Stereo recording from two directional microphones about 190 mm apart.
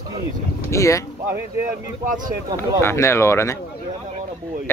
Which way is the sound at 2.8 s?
15° left (ahead or behind).